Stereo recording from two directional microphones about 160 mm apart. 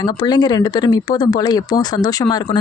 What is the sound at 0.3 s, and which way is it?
Speech, 25° left (ahead or behind).